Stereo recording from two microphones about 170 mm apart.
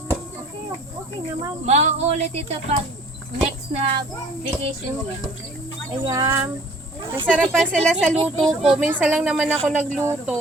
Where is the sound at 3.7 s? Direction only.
25° right (ahead or behind).